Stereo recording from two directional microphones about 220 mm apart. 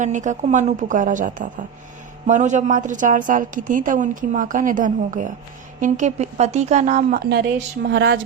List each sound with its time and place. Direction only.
0.0 s a woman's voice: 35° right (ahead or behind)
7.3 s a woman's voice: 50° right (ahead or behind)